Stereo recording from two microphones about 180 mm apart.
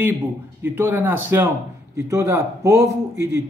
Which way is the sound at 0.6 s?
10° right (ahead or behind).